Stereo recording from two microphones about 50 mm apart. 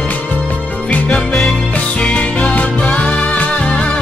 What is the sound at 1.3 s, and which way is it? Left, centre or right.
Music, centre.